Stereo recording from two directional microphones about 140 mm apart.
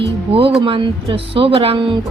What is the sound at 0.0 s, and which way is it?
Speech, 40° right (ahead or behind).